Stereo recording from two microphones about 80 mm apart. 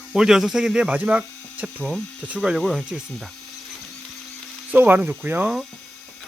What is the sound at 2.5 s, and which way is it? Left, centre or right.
Speech, centre.